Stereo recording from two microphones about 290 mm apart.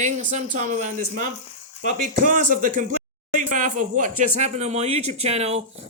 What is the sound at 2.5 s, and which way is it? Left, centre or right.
Speech, right.